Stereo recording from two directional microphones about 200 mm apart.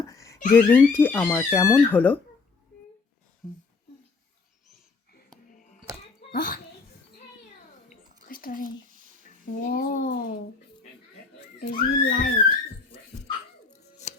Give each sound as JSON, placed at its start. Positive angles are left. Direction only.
{"t": 0.1, "sound": "a sound", "side_deg": 15}
{"t": 0.5, "sound": "speech", "side_deg": 10}
{"t": 6.3, "sound": "speech", "side_deg": 45}
{"t": 8.3, "sound": "a sound", "side_deg": 45}
{"t": 9.6, "sound": "speech", "side_deg": 45}
{"t": 11.6, "sound": "speech", "side_deg": 45}